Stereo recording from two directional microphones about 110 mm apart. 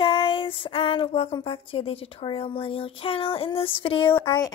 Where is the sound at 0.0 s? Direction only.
50° left (ahead or behind).